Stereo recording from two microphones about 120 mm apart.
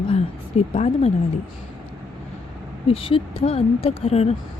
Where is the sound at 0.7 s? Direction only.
60° left (ahead or behind).